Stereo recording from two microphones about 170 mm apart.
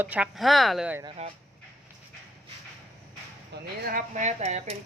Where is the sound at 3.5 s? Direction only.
75° right (ahead or behind).